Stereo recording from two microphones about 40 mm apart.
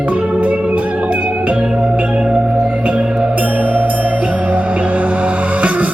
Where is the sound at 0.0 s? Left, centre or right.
Right.